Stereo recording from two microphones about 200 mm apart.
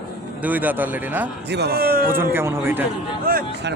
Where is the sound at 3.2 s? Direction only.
45° right (ahead or behind).